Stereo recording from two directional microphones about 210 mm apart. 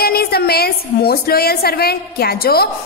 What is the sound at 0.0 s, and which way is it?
A woman's voice, 45° left (ahead or behind).